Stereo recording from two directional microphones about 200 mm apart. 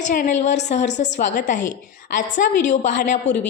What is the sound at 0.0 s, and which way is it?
A woman's voice, 40° left (ahead or behind).